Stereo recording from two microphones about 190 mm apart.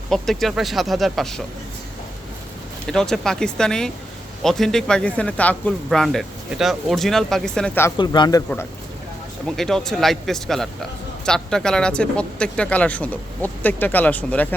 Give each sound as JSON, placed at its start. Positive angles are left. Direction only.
{"t": 0.1, "sound": "speech", "side_deg": 0}
{"t": 2.8, "sound": "speech", "side_deg": 5}
{"t": 7.9, "sound": "a man's voice", "side_deg": 25}
{"t": 9.5, "sound": "speech", "side_deg": 0}